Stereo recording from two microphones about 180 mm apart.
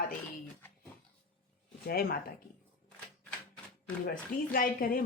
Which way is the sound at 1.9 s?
55° left (ahead or behind).